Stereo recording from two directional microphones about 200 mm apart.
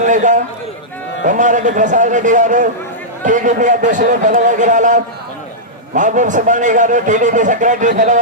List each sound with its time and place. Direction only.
0.0 s a man's voice: 40° right (ahead or behind)